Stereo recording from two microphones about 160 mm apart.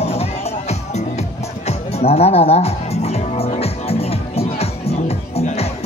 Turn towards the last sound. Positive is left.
turn(degrees=40)  # may be behind; listen again after turning